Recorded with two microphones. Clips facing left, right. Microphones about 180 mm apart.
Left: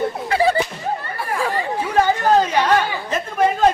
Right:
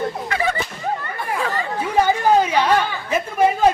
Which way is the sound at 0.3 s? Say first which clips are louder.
Left 8 dB; 35° left (ahead or behind).